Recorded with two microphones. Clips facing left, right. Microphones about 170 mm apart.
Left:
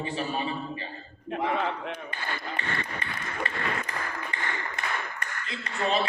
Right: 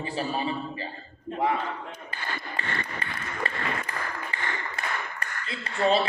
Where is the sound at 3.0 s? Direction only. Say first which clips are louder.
Even; 35° right (ahead or behind).